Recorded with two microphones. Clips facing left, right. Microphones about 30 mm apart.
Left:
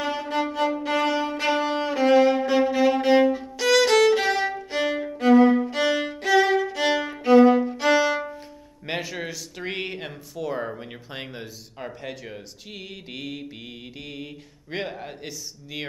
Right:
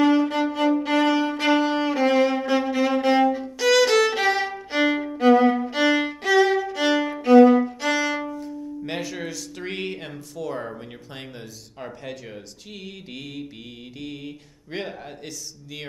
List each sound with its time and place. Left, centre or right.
0.0 s violin: centre
8.3 s music: left
8.8 s speech: centre